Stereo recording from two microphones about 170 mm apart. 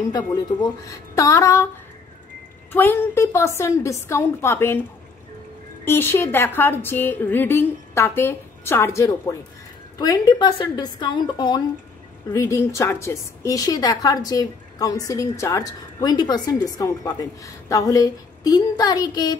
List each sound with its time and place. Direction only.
0.1 s a woman's voice: 20° left (ahead or behind)
2.7 s a woman's voice: 10° left (ahead or behind)
5.9 s a woman's voice: 15° left (ahead or behind)